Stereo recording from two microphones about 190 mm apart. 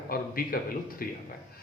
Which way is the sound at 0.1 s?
50° left (ahead or behind).